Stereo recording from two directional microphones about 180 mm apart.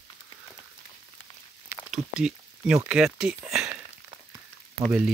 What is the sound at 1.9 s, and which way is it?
Speech, 5° right (ahead or behind).